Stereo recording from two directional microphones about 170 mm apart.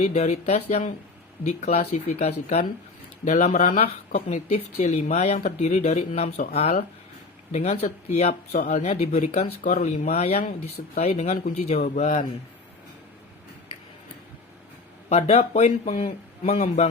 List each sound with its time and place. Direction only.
0.0 s a man's voice: 40° left (ahead or behind)
15.1 s speech: 40° left (ahead or behind)